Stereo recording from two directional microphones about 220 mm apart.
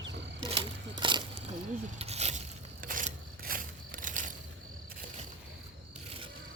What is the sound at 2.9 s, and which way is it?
Scissors, 40° right (ahead or behind).